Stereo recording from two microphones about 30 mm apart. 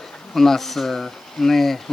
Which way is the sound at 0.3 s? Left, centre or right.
Centre.